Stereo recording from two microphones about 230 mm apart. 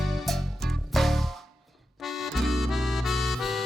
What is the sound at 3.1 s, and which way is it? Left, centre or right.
Music, centre.